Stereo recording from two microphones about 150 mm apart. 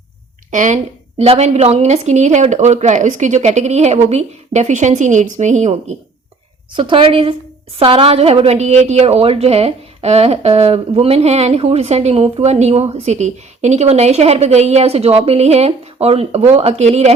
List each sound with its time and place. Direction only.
0.5 s a woman's voice: 55° right (ahead or behind)
1.2 s a woman's voice: 45° right (ahead or behind)
6.7 s a woman's voice: 35° right (ahead or behind)